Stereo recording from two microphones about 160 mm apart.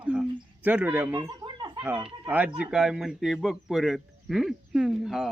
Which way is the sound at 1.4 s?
30° right (ahead or behind).